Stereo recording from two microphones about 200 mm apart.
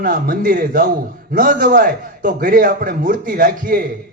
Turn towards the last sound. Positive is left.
turn(degrees=-45)  # may be behind; listen again after turning